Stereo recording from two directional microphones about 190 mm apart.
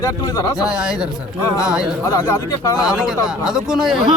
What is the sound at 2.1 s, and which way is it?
Speech, 15° left (ahead or behind).